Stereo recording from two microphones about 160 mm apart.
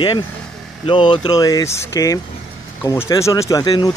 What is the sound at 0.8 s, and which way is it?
Speech, 30° left (ahead or behind).